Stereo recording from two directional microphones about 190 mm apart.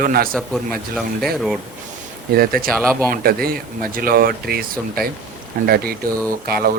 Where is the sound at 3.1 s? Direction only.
50° right (ahead or behind).